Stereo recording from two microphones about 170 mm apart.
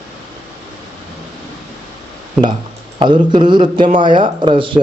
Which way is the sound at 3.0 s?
25° right (ahead or behind).